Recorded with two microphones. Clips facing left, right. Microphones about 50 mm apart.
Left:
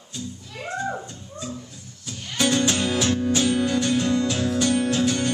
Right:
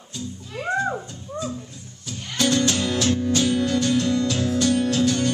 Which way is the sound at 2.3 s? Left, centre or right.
Centre.